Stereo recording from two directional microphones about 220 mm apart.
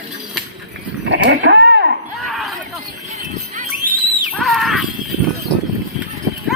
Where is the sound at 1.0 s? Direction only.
55° right (ahead or behind).